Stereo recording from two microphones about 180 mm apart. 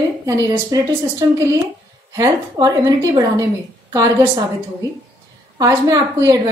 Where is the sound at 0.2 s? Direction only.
20° right (ahead or behind).